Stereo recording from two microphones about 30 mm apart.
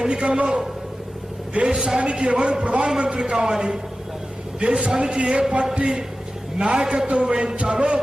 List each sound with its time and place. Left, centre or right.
0.1 s a man's voice: right
1.6 s a man's voice: right
3.3 s a man's voice: right
4.6 s a man's voice: right